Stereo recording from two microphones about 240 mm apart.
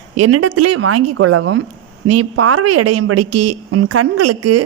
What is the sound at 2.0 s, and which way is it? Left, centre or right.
A woman's voice, right.